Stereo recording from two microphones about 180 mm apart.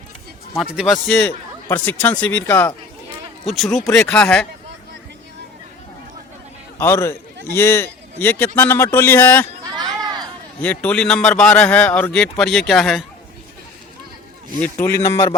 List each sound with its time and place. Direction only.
0.5 s a man's voice: centre (ahead or behind)
6.7 s a man's voice: 15° left (ahead or behind)
9.7 s a sound: 20° right (ahead or behind)
10.6 s a man's voice: 10° left (ahead or behind)
14.6 s a man's voice: 10° left (ahead or behind)